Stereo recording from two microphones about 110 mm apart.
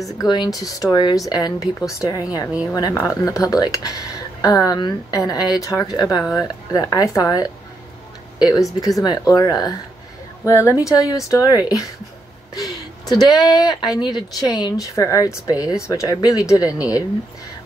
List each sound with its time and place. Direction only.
0.0 s a woman's voice: 35° left (ahead or behind)